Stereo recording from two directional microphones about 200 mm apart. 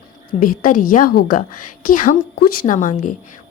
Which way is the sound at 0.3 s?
45° left (ahead or behind).